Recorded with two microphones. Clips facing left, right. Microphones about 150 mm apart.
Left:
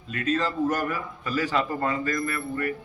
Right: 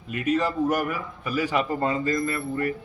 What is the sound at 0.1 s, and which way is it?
A man's voice, 15° right (ahead or behind).